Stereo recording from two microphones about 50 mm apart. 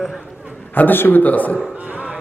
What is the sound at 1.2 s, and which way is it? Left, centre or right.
Speech, left.